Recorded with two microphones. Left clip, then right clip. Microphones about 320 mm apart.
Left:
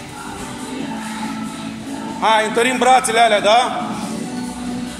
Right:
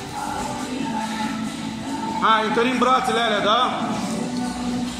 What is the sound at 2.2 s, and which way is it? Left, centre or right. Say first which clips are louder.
A man's voice: left 4 dB; centre.